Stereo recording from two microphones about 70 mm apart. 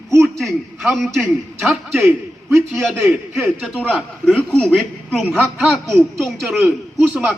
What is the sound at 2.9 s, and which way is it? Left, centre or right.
Speech, right.